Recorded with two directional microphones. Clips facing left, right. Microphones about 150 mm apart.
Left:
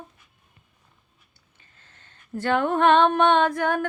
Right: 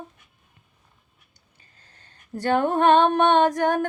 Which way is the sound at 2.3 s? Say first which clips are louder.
Right 1 dB; 40° right (ahead or behind).